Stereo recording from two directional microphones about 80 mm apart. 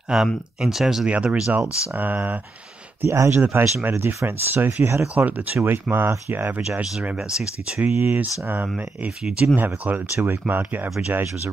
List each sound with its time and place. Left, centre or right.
0.1 s speech: centre; by 2.4 s right
3.0 s speech: right
5.0 s speech: centre
6.8 s speech: centre
7.9 s speech: right
8.7 s speech: centre